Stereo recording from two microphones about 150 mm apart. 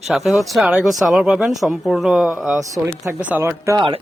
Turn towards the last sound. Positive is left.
turn(degrees=-20)  # may be behind; listen again after turning